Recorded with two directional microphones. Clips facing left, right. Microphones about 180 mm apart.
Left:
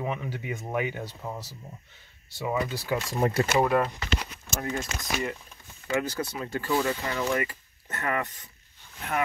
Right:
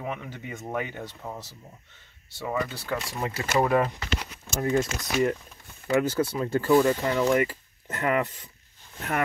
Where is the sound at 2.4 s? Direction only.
10° left (ahead or behind).